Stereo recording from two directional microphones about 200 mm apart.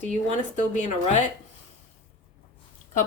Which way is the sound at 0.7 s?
35° left (ahead or behind).